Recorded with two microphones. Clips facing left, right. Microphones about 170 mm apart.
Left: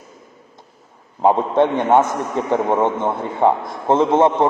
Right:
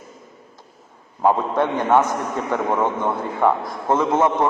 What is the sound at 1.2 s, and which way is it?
A man's voice, 25° left (ahead or behind).